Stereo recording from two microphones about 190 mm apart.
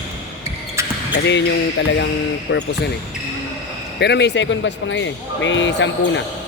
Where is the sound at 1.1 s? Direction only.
65° left (ahead or behind).